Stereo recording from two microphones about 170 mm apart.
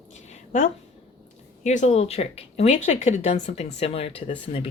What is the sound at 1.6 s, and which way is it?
Speech, 45° left (ahead or behind).